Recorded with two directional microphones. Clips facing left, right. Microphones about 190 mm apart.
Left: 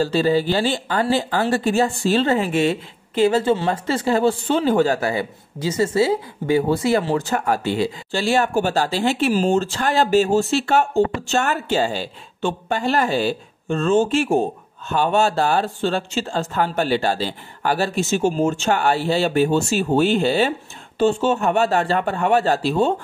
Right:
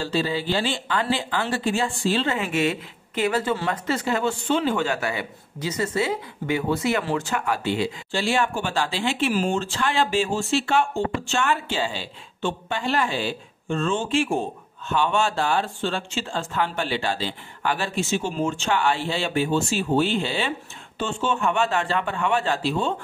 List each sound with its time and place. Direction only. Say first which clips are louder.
0.0 s speech: left 7 dB; 45° left (ahead or behind)